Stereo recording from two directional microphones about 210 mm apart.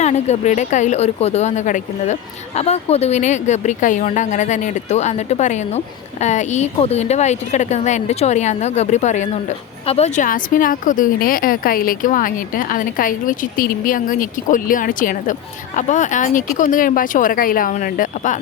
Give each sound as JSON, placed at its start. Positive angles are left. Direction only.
{"t": 0.0, "sound": "speech", "side_deg": 35}